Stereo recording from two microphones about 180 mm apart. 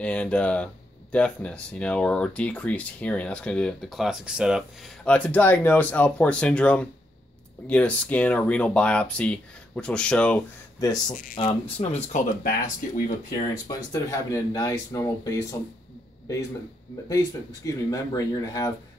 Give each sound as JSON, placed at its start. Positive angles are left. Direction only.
{"t": 0.0, "sound": "speech", "side_deg": 5}
{"t": 10.8, "sound": "speech", "side_deg": 20}
{"t": 11.4, "sound": "speech", "side_deg": 30}
{"t": 11.8, "sound": "speech", "side_deg": 40}
{"t": 13.7, "sound": "speech", "side_deg": 20}
{"t": 17.1, "sound": "speech", "side_deg": 20}